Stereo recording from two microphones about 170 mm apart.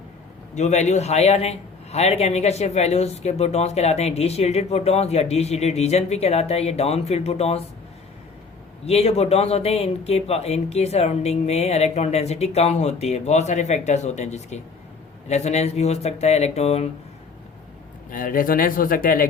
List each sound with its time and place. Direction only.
0.5 s a man's voice: 45° left (ahead or behind)
8.9 s a man's voice: 35° left (ahead or behind)
18.1 s speech: 55° left (ahead or behind)